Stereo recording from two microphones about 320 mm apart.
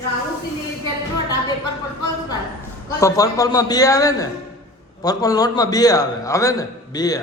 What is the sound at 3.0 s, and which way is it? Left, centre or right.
A man's voice, centre.